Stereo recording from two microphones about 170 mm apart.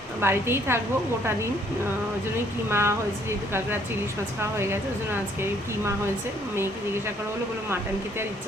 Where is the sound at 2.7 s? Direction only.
15° right (ahead or behind).